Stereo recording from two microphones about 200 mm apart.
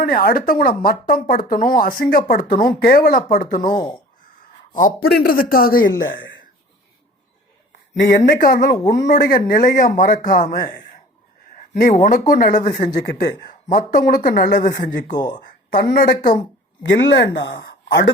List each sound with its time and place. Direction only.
0.0 s speech: 45° left (ahead or behind)
3.7 s speech: 20° left (ahead or behind)
4.7 s speech: 40° left (ahead or behind)
8.0 s speech: 40° left (ahead or behind)
14.7 s speech: 20° left (ahead or behind)
15.4 s a woman's voice: 45° left (ahead or behind)
16.9 s speech: 60° left (ahead or behind)